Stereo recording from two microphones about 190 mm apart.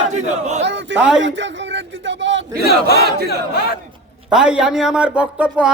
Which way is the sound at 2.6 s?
60° left (ahead or behind).